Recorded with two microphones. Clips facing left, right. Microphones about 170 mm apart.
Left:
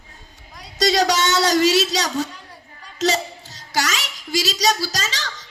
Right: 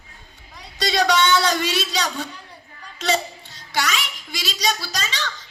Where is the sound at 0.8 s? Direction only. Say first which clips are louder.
Left 1 dB; 40° left (ahead or behind).